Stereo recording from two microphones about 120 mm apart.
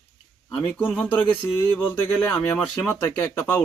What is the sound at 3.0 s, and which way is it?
Speech, 15° left (ahead or behind).